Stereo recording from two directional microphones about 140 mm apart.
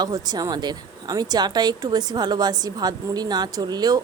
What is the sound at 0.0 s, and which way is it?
A woman's voice, 30° right (ahead or behind).